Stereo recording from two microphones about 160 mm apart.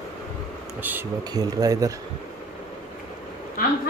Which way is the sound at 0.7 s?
10° right (ahead or behind).